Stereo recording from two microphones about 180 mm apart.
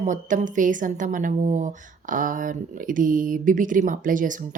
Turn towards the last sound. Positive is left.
turn(degrees=-45)  # may be behind; listen again after turning